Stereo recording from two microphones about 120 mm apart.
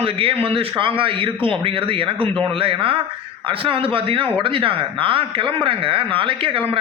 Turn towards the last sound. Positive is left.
turn(degrees=-45)  # may be behind; listen again after turning